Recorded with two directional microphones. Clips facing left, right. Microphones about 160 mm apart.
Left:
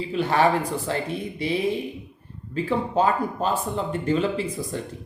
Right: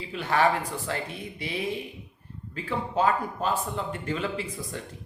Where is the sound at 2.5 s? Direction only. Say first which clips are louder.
Left 7 dB; 30° left (ahead or behind).